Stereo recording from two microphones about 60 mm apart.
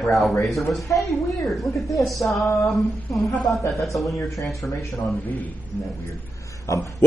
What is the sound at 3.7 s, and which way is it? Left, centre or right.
Speech, centre.